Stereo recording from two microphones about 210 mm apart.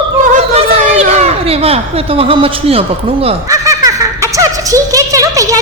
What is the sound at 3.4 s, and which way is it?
Giggle, 15° right (ahead or behind).